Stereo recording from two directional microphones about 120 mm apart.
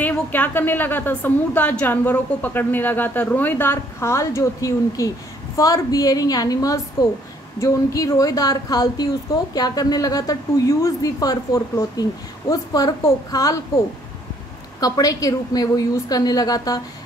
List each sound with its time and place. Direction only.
0.0 s a woman's voice: 15° left (ahead or behind)
14.8 s a woman's voice: 30° left (ahead or behind)